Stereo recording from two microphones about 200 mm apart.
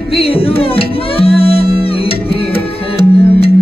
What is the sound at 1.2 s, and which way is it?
Music, 30° left (ahead or behind).